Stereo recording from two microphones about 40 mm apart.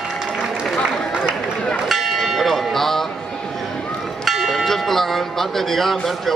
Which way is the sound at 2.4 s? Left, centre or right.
Centre.